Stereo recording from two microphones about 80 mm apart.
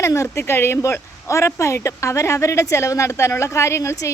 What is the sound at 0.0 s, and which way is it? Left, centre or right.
Speech, left.